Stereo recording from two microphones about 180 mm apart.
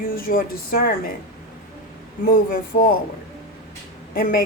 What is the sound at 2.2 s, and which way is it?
Speech, 50° left (ahead or behind).